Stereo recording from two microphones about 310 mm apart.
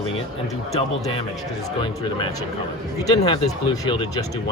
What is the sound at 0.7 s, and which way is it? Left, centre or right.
Speech, centre.